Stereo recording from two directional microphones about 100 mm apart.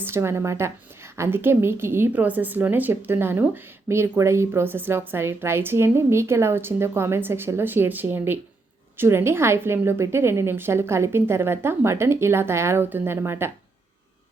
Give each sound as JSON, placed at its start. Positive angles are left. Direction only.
{"t": 0.0, "sound": "a woman's voice", "side_deg": -25}